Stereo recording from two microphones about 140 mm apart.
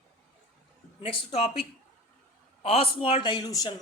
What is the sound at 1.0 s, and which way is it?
Speech, 50° left (ahead or behind).